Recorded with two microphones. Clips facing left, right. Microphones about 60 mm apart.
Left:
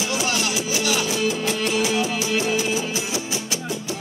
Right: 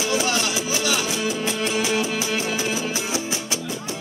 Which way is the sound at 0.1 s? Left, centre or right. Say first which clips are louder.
Right 1 dB; right.